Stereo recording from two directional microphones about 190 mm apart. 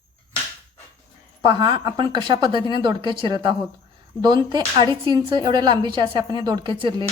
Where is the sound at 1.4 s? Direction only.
25° right (ahead or behind).